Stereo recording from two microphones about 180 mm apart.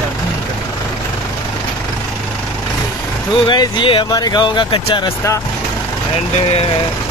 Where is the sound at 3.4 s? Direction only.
25° left (ahead or behind).